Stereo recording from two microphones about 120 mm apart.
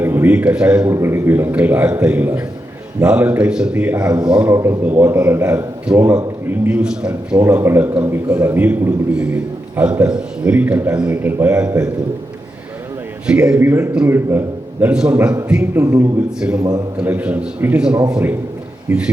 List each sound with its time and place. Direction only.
0.0 s a man's voice: 15° right (ahead or behind)
0.9 s a man's voice: 20° right (ahead or behind)
4.5 s a man's voice: 25° right (ahead or behind)
4.8 s a man's voice: 15° right (ahead or behind)
7.4 s a man's voice: 20° right (ahead or behind)
13.2 s a man's voice: 5° right (ahead or behind)
13.6 s a man's voice: 20° right (ahead or behind)
15.7 s a man's voice: 25° right (ahead or behind)
16.4 s a man's voice: 5° right (ahead or behind); by 19.0 s 20° right (ahead or behind)